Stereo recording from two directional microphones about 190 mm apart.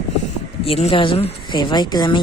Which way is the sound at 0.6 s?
30° left (ahead or behind).